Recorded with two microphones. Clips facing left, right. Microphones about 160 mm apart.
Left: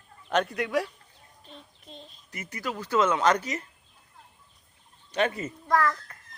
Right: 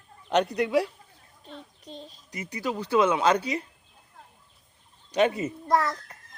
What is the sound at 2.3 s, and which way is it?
A child's voice, 15° right (ahead or behind).